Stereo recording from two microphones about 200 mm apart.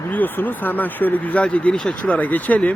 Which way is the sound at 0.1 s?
10° left (ahead or behind).